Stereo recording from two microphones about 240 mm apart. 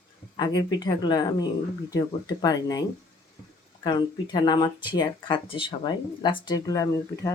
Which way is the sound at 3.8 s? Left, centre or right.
Centre.